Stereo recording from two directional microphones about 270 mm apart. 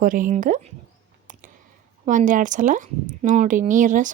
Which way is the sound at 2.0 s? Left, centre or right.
Right.